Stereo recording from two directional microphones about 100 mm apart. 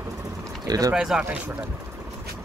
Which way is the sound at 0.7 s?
35° right (ahead or behind).